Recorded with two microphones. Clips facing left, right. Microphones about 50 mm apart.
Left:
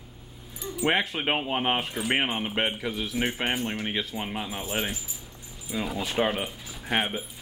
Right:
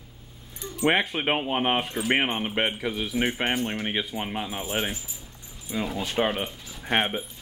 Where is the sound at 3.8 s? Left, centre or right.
Centre.